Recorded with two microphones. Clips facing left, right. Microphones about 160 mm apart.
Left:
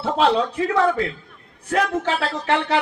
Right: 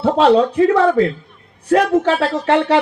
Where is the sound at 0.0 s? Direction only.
40° right (ahead or behind).